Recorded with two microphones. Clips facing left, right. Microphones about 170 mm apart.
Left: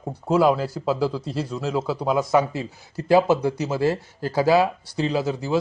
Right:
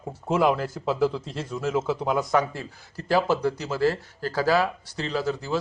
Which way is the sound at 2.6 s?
15° left (ahead or behind).